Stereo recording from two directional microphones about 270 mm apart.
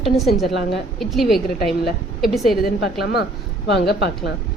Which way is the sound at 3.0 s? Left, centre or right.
Left.